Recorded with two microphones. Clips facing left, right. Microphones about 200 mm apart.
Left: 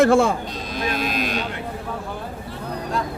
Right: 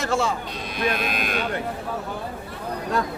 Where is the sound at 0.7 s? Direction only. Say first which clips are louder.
Left 1 dB; 55° right (ahead or behind).